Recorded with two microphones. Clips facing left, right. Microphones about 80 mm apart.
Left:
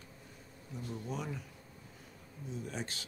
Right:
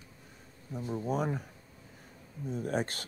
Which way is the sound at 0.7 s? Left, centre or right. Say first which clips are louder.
Right 8 dB; right.